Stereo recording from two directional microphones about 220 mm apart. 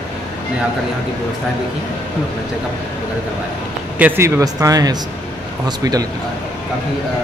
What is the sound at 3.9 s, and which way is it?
Speech, 10° right (ahead or behind).